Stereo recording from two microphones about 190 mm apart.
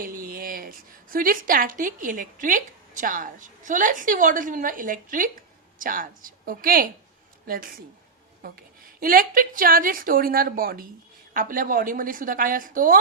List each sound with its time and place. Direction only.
0.0 s a woman's voice: 50° right (ahead or behind)